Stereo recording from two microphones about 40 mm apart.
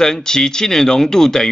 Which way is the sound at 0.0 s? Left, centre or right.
Centre.